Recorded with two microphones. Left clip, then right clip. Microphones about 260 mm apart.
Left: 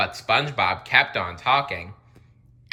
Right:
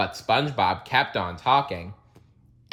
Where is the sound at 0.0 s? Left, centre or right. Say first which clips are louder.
Left 1 dB; centre.